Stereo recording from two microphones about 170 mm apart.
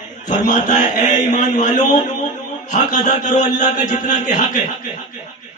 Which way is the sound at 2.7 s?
45° left (ahead or behind).